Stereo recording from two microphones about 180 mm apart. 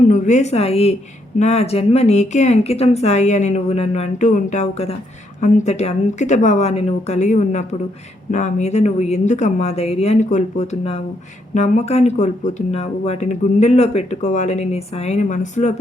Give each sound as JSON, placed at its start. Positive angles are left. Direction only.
{"t": 0.1, "sound": "a woman's voice", "side_deg": 40}